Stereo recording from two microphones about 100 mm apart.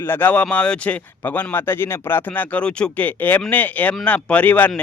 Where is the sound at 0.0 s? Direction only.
20° left (ahead or behind).